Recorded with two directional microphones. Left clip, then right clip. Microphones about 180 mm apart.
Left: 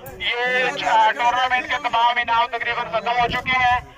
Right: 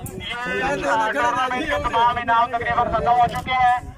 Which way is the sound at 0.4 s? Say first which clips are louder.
Left 4 dB; 20° left (ahead or behind).